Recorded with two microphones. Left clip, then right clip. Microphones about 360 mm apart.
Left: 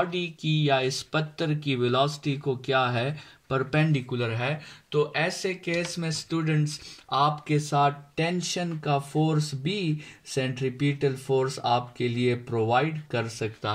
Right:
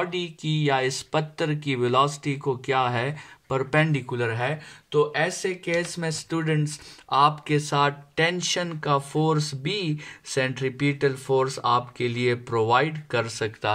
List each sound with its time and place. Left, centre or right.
0.1 s speech: centre